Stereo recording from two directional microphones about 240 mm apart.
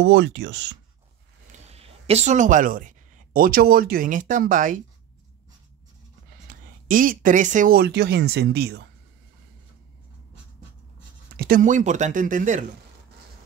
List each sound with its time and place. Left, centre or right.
0.0 s speech: right
1.5 s speech: right
6.4 s speech: right
11.3 s speech: right